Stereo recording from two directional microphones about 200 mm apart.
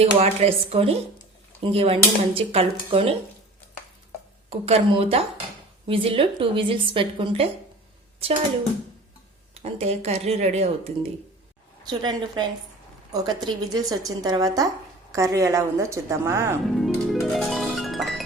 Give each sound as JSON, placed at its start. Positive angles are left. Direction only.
{"t": 0.0, "sound": "a woman's voice", "side_deg": -30}
{"t": 4.4, "sound": "a woman's voice", "side_deg": -30}
{"t": 9.6, "sound": "speech", "side_deg": -30}
{"t": 11.9, "sound": "a woman's voice", "side_deg": -20}
{"t": 16.6, "sound": "music", "side_deg": 0}